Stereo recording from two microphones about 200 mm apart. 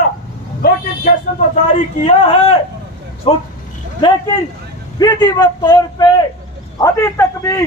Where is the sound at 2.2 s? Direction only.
30° left (ahead or behind).